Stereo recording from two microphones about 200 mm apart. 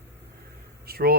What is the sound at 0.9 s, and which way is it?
Speech, 50° right (ahead or behind).